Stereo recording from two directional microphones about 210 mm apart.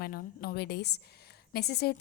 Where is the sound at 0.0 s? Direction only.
45° left (ahead or behind).